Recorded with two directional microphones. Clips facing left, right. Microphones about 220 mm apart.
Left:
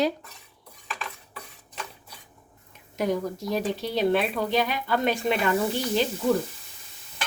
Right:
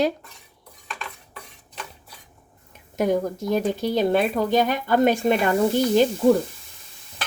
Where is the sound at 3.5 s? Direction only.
45° right (ahead or behind).